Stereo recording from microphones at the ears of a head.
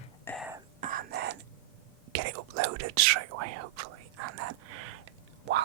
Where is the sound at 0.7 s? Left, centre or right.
Right.